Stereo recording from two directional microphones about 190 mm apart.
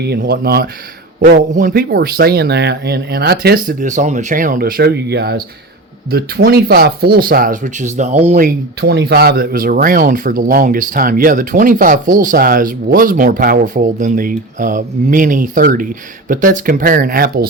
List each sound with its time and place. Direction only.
0.0 s speech: 55° right (ahead or behind)